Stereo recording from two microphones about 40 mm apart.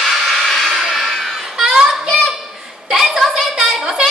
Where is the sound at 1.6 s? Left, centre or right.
Right.